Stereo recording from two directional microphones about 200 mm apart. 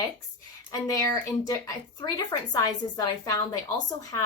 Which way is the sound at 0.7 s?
15° left (ahead or behind).